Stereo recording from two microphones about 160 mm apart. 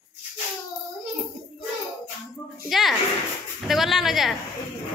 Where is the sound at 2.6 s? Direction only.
Centre (ahead or behind).